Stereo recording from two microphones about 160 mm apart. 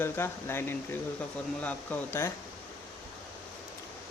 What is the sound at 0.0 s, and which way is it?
Speech, 15° left (ahead or behind).